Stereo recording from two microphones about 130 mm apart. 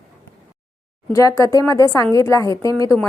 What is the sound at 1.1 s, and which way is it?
A woman's voice, 25° left (ahead or behind).